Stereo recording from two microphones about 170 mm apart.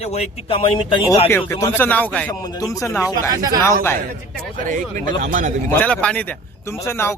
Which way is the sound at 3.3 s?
20° right (ahead or behind).